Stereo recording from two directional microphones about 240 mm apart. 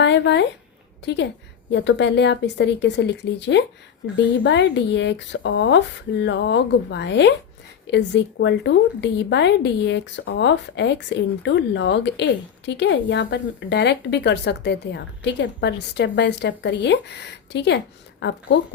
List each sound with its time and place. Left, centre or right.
0.0 s a woman's voice: left